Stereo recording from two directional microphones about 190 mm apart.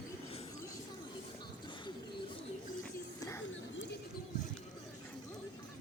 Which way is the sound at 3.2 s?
15° left (ahead or behind).